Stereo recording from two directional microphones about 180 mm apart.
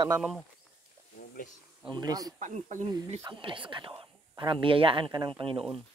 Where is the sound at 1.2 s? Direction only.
55° left (ahead or behind).